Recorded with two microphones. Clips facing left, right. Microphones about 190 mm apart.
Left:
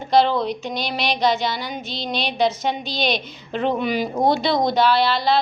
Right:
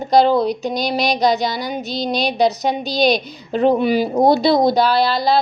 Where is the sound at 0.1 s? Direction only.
40° right (ahead or behind).